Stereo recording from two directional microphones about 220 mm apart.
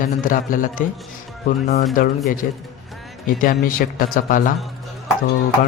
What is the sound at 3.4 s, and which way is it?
Speech, 40° left (ahead or behind).